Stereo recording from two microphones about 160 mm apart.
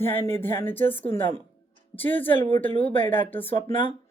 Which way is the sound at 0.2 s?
15° left (ahead or behind).